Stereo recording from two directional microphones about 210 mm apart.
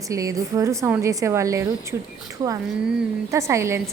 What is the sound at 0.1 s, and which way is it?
A woman's voice, 15° right (ahead or behind).